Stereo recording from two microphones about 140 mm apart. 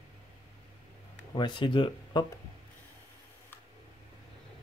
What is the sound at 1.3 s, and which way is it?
Speech, 35° left (ahead or behind).